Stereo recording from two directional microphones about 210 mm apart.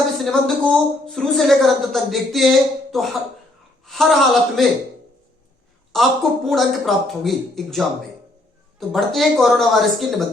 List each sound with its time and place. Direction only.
0.2 s a woman's voice: centre (ahead or behind)
5.9 s a woman's voice: centre (ahead or behind)
8.9 s a woman's voice: centre (ahead or behind)